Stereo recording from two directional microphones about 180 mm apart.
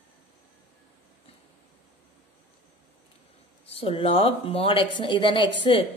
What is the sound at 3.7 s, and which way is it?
Speech, 35° left (ahead or behind).